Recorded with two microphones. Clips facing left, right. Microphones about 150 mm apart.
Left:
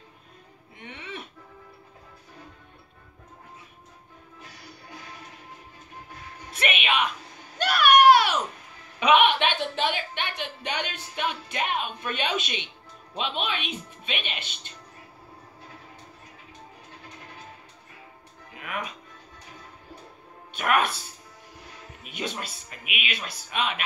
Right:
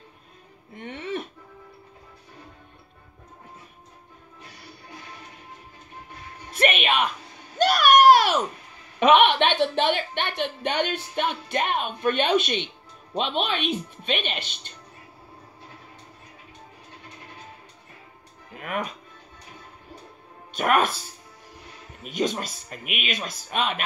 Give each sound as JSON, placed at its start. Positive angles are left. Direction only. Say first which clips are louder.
{"t": 0.7, "sound": "music", "louder": "right 9 dB", "side_deg": -45}
{"t": 6.5, "sound": "a sound", "louder": "right 4 dB", "side_deg": -45}
{"t": 9.0, "sound": "a woman's voice", "louder": "right 3 dB", "side_deg": -50}
{"t": 18.5, "sound": "music", "louder": "right 4 dB", "side_deg": -45}
{"t": 20.5, "sound": "speech", "louder": "right 3 dB", "side_deg": -40}
{"t": 22.1, "sound": "speech", "louder": "right 7 dB", "side_deg": -40}